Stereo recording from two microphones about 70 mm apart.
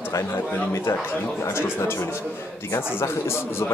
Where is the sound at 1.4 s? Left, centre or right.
Left.